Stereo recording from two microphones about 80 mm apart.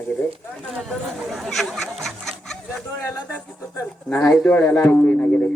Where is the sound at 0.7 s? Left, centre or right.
Centre.